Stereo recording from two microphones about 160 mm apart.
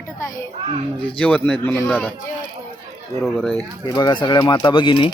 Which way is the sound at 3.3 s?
10° left (ahead or behind).